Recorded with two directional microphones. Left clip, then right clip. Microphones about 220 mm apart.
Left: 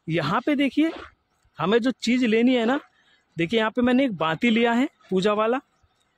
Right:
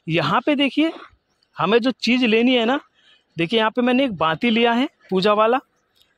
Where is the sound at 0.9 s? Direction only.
35° right (ahead or behind).